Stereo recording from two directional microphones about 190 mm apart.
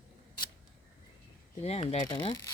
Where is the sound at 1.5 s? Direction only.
35° left (ahead or behind).